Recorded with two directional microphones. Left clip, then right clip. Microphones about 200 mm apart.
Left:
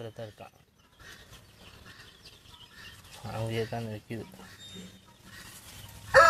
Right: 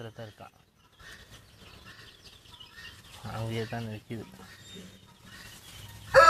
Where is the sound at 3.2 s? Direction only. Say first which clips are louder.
Left 2 dB; 15° left (ahead or behind).